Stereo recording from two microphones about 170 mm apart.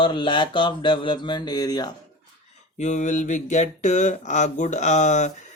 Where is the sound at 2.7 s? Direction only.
45° left (ahead or behind).